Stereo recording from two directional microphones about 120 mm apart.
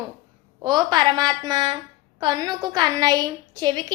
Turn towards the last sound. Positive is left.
turn(degrees=-35)  # may be behind; listen again after turning